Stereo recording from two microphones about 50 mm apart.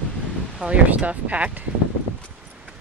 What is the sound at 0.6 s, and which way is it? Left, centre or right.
Speech, right.